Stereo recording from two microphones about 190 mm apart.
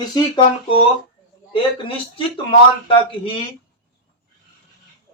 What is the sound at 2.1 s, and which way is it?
Speech, 25° left (ahead or behind).